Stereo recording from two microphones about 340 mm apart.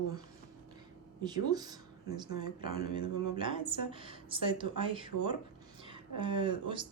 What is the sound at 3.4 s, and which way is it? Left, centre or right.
Speech, centre.